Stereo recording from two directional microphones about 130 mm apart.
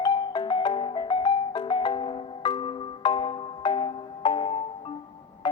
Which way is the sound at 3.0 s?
35° left (ahead or behind).